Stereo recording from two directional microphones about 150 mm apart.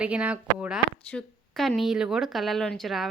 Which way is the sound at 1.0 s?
5° left (ahead or behind).